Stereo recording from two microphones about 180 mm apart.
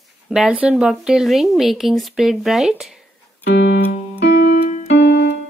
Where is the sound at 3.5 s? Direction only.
70° left (ahead or behind).